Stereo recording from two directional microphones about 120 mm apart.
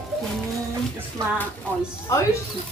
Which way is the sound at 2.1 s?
30° left (ahead or behind).